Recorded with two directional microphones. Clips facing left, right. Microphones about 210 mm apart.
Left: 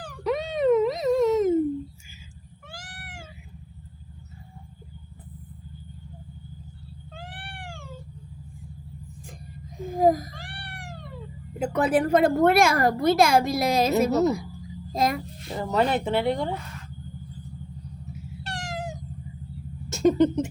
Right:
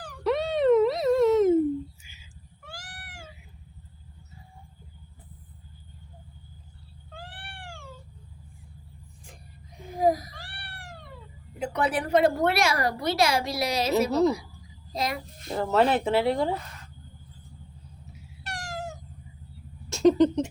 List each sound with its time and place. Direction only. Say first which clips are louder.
0.3 s music: even; centre (ahead or behind)
2.6 s cat: left 2 dB; 25° left (ahead or behind)
9.8 s a sound: left 3 dB; 50° left (ahead or behind)
11.6 s a woman's voice: left 5 dB; 45° left (ahead or behind)
14.1 s speech: left 1 dB; 5° left (ahead or behind)
14.9 s a woman's voice: left 5 dB; 50° left (ahead or behind)
15.5 s speech: right 1 dB; centre (ahead or behind)
18.4 s cat: left 2 dB; 25° left (ahead or behind)
19.9 s a sound: even; 5° left (ahead or behind)